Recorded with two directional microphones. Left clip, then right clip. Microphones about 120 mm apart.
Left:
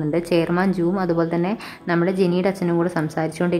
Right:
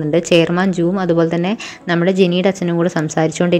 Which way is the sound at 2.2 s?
35° left (ahead or behind).